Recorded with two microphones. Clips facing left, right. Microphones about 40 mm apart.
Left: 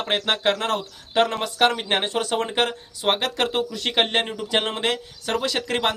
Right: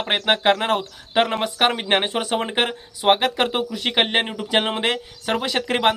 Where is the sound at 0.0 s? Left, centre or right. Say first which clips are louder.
Right 3 dB; right.